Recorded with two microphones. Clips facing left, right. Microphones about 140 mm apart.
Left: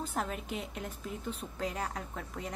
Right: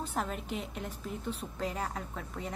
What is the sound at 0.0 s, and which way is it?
A woman's voice, 30° right (ahead or behind).